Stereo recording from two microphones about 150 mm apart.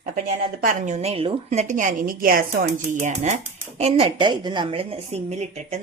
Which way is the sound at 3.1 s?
50° right (ahead or behind).